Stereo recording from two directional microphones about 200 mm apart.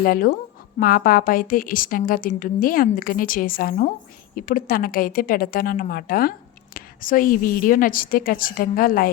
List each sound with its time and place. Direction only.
0.0 s a woman's voice: 45° left (ahead or behind)